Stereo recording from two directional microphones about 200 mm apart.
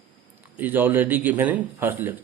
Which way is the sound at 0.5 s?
10° right (ahead or behind).